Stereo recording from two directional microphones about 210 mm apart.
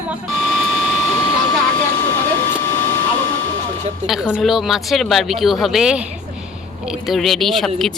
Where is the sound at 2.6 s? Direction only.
10° left (ahead or behind).